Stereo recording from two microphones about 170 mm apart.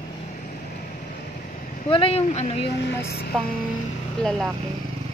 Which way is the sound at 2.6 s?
75° left (ahead or behind).